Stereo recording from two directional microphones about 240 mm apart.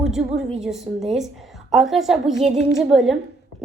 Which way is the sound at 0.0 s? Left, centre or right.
Centre.